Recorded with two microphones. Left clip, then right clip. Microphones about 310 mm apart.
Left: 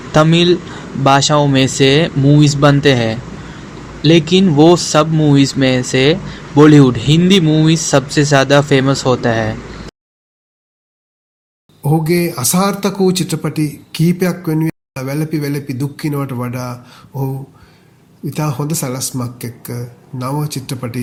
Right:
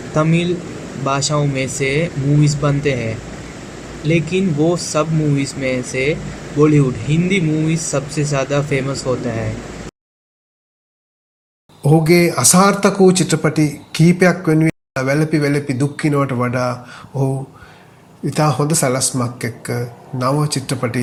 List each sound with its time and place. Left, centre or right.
0.1 s speech: left
4.1 s speech: left
11.8 s speech: centre